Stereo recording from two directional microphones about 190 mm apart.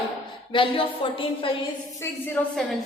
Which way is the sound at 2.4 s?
5° left (ahead or behind).